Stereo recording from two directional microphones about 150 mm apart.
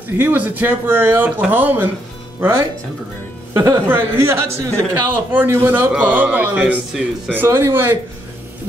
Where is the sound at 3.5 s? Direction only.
20° right (ahead or behind).